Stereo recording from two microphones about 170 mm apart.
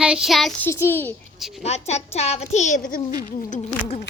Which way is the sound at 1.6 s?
40° left (ahead or behind).